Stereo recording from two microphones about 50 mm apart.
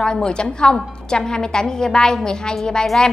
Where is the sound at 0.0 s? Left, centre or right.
Centre.